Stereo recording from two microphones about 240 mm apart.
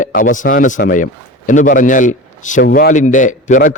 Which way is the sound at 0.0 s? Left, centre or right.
Left.